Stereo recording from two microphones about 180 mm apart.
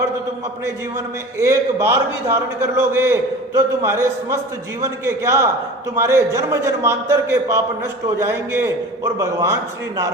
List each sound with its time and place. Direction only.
0.6 s a man's voice: 15° right (ahead or behind)